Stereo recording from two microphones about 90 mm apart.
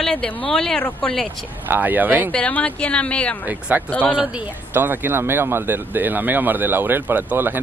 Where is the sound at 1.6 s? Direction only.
20° right (ahead or behind).